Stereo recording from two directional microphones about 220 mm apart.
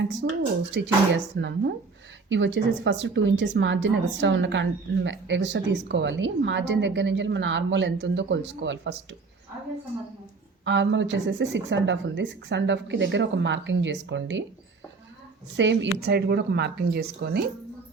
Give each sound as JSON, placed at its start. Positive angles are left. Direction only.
{"t": 0.1, "sound": "speech", "side_deg": -55}
{"t": 10.7, "sound": "speech", "side_deg": -55}
{"t": 15.5, "sound": "speech", "side_deg": -55}